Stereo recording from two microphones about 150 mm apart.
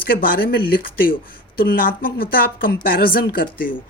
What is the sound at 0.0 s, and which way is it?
Speech, 75° left (ahead or behind).